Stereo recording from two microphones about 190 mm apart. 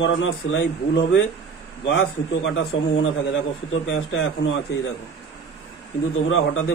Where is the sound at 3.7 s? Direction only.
90° left.